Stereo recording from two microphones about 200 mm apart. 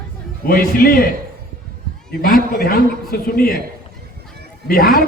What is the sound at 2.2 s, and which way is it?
A man's voice, 45° left (ahead or behind).